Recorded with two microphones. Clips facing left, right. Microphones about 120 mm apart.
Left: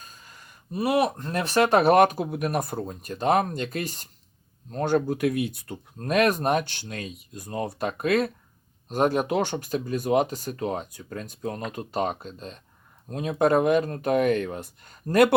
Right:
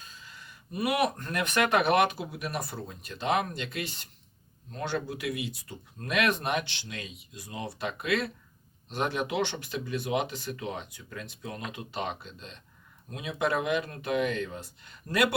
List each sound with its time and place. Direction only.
0.0 s a sound: 45° left (ahead or behind)
0.7 s speech: 30° left (ahead or behind); by 5.8 s 55° left (ahead or behind)
6.0 s speech: 40° left (ahead or behind); by 14.7 s 60° left (ahead or behind)
14.8 s speech: 45° left (ahead or behind)